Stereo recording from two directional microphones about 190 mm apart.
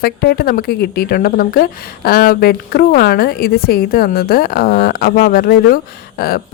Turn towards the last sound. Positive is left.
turn(degrees=55)  # may be behind; listen again after turning